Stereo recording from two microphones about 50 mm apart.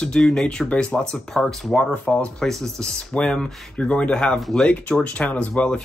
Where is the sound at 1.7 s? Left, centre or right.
Left.